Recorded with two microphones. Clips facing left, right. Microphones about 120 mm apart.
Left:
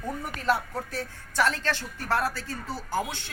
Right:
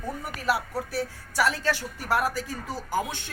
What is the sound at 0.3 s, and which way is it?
A woman's voice, 10° right (ahead or behind).